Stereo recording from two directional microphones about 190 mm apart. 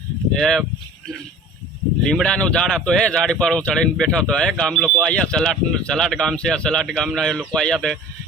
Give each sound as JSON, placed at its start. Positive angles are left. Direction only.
{"t": 0.3, "sound": "speech", "side_deg": 5}
{"t": 2.0, "sound": "speech", "side_deg": 5}